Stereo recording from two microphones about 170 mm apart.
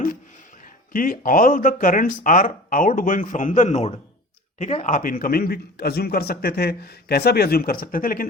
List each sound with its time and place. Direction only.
0.9 s a man's voice: 55° left (ahead or behind)